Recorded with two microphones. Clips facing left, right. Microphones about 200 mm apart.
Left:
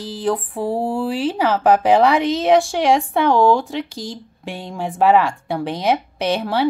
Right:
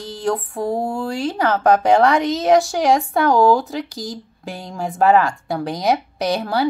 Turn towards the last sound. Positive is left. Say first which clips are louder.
# left 1 dB
turn(degrees=0)  # may be behind; listen again after turning